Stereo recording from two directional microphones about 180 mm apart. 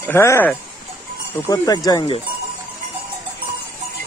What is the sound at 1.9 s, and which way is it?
Speech, 30° left (ahead or behind).